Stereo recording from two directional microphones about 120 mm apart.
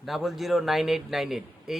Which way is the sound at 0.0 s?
Centre (ahead or behind).